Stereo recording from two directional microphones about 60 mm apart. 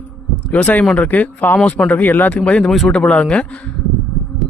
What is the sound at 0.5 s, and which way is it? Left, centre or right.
Speech, left.